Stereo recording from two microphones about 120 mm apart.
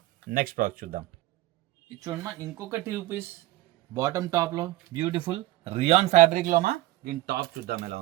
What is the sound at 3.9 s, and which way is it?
Speech, 30° right (ahead or behind).